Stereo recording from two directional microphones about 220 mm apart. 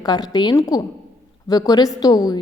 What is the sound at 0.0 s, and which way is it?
A woman's voice, 20° left (ahead or behind).